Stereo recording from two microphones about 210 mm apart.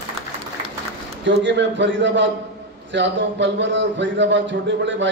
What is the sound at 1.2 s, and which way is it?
A man's voice, 60° right (ahead or behind).